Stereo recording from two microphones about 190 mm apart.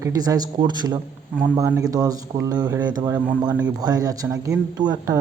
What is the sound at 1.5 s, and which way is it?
A man's voice, 10° right (ahead or behind).